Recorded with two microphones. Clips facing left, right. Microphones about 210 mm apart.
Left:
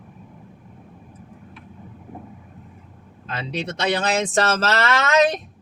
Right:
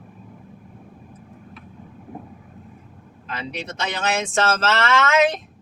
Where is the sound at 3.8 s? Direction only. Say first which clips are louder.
Left 3 dB; 35° left (ahead or behind).